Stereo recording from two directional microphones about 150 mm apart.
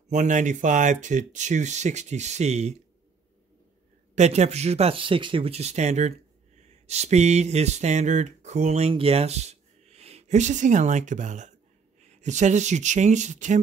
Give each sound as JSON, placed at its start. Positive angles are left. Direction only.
{"t": 0.1, "sound": "speech", "side_deg": -55}
{"t": 4.1, "sound": "speech", "side_deg": -50}